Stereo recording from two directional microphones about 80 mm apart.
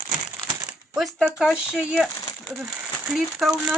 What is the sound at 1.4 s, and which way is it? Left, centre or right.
Speech, centre.